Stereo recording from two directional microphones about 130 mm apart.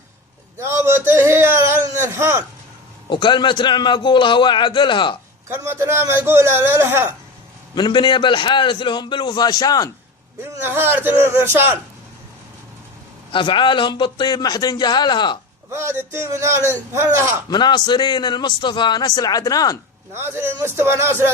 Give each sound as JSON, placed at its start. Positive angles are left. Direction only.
{"t": 0.6, "sound": "a sound", "side_deg": -20}
{"t": 3.1, "sound": "speech", "side_deg": 35}
{"t": 5.5, "sound": "speech", "side_deg": -20}
{"t": 7.8, "sound": "speech", "side_deg": 35}
{"t": 10.4, "sound": "speech", "side_deg": -20}
{"t": 13.3, "sound": "speech", "side_deg": 40}
{"t": 15.7, "sound": "speech", "side_deg": -20}
{"t": 17.5, "sound": "speech", "side_deg": 35}
{"t": 20.1, "sound": "speech", "side_deg": -20}